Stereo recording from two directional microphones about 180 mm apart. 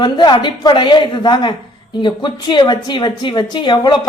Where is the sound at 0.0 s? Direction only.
25° left (ahead or behind).